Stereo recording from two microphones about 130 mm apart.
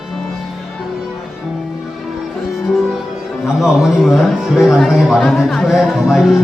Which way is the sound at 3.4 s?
5° right (ahead or behind).